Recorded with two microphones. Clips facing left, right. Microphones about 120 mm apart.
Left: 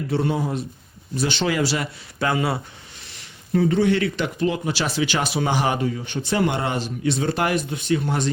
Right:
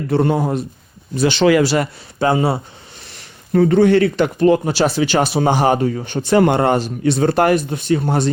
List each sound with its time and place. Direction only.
0.1 s speech: 50° right (ahead or behind)
1.1 s speech: 90° right
2.1 s speech: 30° right (ahead or behind)
3.1 s speech: 50° right (ahead or behind)